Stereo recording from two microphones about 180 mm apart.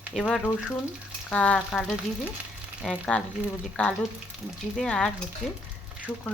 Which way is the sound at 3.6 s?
5° left (ahead or behind).